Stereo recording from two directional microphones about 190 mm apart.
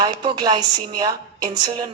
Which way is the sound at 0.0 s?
20° right (ahead or behind).